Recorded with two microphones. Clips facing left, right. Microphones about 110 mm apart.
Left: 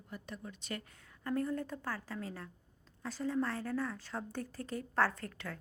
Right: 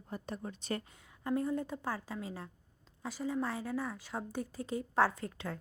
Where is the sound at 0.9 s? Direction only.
20° right (ahead or behind).